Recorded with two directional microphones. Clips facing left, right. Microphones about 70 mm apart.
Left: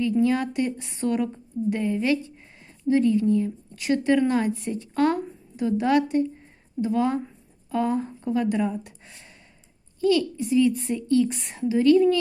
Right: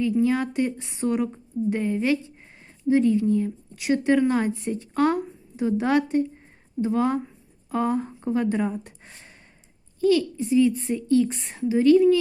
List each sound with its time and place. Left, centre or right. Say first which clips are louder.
0.3 s a woman's voice: even; right